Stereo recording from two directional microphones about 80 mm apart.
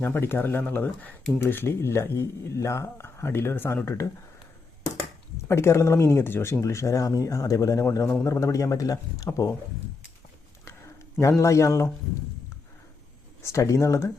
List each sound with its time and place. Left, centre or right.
0.0 s speech: left
5.5 s speech: left
11.2 s speech: left
13.4 s speech: left